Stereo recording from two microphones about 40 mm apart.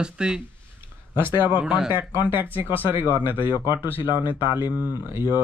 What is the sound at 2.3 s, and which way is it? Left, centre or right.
Speech, right.